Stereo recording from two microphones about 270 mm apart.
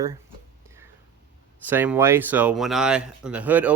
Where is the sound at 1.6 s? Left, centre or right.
Centre.